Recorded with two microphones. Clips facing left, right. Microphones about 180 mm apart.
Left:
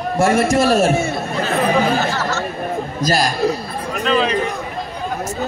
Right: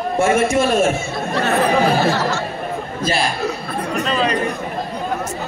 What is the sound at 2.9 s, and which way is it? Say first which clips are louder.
Speech: left 2 dB; 40° left (ahead or behind).